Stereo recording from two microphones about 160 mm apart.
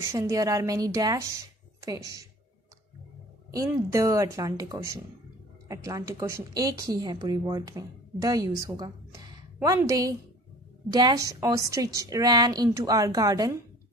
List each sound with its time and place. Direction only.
0.0 s a woman's voice: 15° right (ahead or behind)
3.5 s a woman's voice: 20° right (ahead or behind)